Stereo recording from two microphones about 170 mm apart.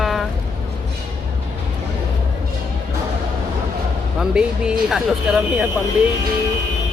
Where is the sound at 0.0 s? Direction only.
Centre (ahead or behind).